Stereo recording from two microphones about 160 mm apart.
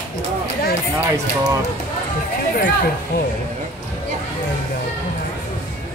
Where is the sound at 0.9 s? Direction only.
15° right (ahead or behind).